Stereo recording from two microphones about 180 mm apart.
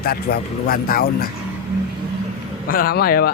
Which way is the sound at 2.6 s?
55° left (ahead or behind).